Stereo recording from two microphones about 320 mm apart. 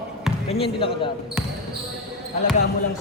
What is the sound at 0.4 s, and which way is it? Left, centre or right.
Speech, centre.